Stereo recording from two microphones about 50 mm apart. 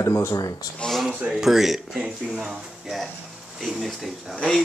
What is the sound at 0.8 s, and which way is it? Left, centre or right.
Speech, centre.